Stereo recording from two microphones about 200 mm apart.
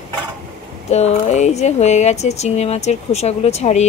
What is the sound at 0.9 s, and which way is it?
Speech, 35° left (ahead or behind).